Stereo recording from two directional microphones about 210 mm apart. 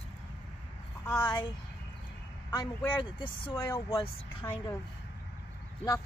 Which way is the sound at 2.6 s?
20° left (ahead or behind).